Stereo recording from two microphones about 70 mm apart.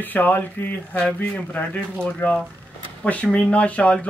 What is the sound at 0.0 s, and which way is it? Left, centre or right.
Speech, left.